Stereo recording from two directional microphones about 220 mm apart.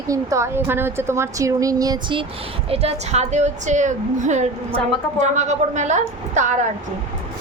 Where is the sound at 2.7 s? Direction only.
30° right (ahead or behind).